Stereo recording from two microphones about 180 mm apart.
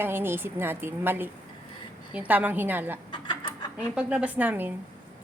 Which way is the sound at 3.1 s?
25° left (ahead or behind).